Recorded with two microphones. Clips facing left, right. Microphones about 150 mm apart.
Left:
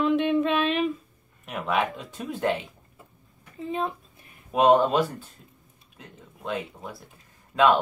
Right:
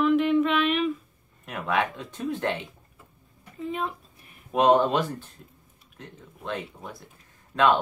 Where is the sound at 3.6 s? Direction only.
20° left (ahead or behind).